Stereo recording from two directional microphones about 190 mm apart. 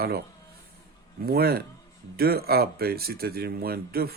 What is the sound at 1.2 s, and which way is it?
Speech, 55° right (ahead or behind).